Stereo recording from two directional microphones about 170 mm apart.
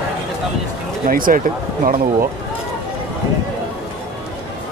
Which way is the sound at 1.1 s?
55° right (ahead or behind).